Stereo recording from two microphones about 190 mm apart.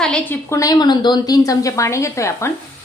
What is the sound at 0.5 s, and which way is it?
A woman's voice, 20° left (ahead or behind).